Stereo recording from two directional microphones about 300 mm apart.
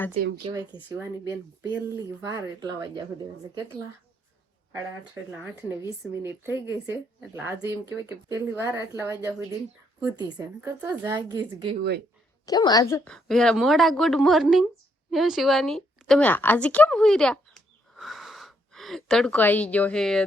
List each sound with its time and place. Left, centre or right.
0.4 s speech: centre
5.3 s speech: centre
10.0 s speech: centre
11.8 s speech: right
12.5 s a woman's voice: centre